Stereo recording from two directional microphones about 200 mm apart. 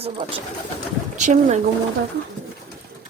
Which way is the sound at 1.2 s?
35° right (ahead or behind).